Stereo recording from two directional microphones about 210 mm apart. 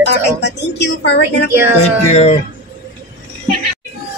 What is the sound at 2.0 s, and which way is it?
Speech, 30° left (ahead or behind).